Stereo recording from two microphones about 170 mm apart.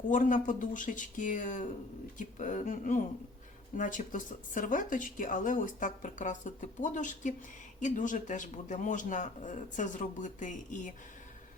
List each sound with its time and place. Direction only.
0.1 s speech: 50° left (ahead or behind)